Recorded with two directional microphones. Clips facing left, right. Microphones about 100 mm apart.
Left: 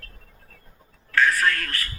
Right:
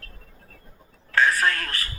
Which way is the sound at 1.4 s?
25° right (ahead or behind).